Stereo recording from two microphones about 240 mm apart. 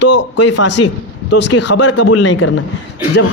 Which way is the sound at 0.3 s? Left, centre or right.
Left.